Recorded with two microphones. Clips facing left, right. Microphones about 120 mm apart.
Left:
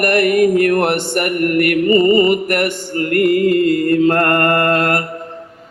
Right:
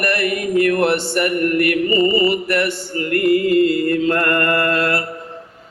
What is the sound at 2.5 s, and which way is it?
Mantra, 50° left (ahead or behind).